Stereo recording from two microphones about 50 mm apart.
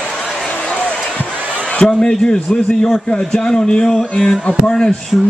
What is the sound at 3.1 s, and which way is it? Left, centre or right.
A man's voice, centre.